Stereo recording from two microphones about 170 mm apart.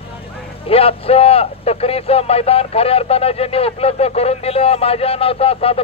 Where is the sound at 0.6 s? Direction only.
35° left (ahead or behind).